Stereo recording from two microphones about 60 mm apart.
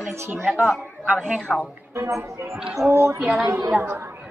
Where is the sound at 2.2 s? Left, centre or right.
Right.